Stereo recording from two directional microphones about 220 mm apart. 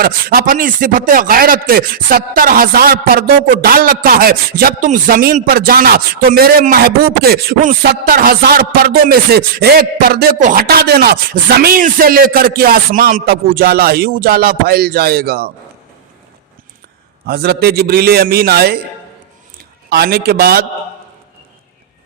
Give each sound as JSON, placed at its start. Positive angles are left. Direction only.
{"t": 0.0, "sound": "speech", "side_deg": -40}
{"t": 17.2, "sound": "a man's voice", "side_deg": -45}
{"t": 19.9, "sound": "a man's voice", "side_deg": -45}